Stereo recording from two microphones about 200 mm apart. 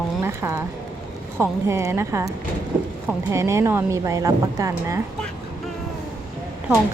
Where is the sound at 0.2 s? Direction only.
10° right (ahead or behind).